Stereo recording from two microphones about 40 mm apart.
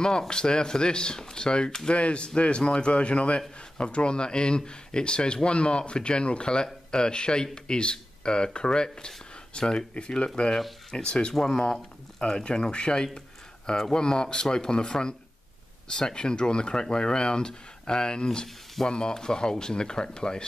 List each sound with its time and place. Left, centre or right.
0.3 s a man's voice: left
11.3 s speech: centre
12.2 s a man's voice: left